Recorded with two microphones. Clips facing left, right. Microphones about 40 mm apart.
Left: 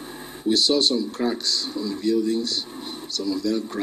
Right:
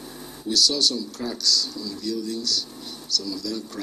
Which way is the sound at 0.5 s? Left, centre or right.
Left.